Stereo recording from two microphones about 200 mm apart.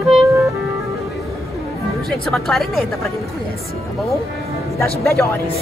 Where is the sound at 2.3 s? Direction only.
Centre (ahead or behind).